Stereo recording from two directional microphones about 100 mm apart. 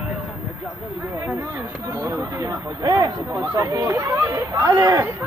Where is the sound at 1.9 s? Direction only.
30° right (ahead or behind).